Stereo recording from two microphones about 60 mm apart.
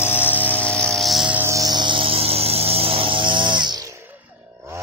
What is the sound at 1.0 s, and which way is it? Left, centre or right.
Buzz, centre.